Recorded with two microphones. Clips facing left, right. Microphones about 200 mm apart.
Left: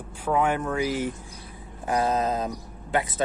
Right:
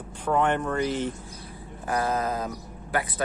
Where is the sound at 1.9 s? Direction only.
20° left (ahead or behind).